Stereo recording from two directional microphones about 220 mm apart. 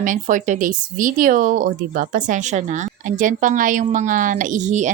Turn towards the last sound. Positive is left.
turn(degrees=-35)  # may be behind; listen again after turning